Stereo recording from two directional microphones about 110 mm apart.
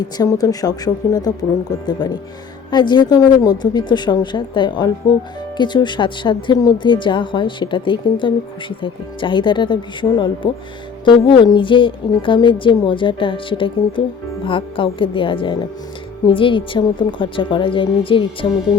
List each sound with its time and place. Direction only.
0.0 s a woman's voice: 35° left (ahead or behind); by 18.3 s 50° left (ahead or behind)